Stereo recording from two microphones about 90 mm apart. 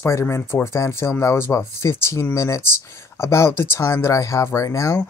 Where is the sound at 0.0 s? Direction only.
30° left (ahead or behind).